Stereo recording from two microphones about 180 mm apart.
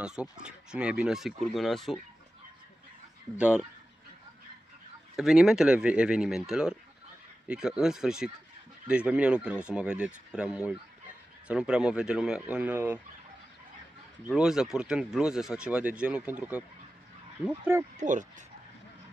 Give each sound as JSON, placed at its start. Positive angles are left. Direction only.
{"t": 0.0, "sound": "speech", "side_deg": -5}
{"t": 3.3, "sound": "speech", "side_deg": -5}
{"t": 5.1, "sound": "speech", "side_deg": -5}
{"t": 14.3, "sound": "speech", "side_deg": -5}
{"t": 17.9, "sound": "speech", "side_deg": -45}